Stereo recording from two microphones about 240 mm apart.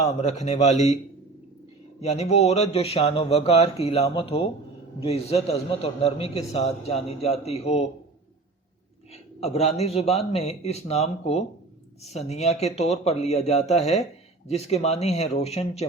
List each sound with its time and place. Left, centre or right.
0.0 s a man's voice: left
2.0 s a man's voice: left
9.1 s a man's voice: left